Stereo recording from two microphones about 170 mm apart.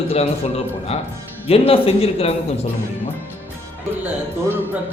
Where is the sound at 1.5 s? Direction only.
35° left (ahead or behind).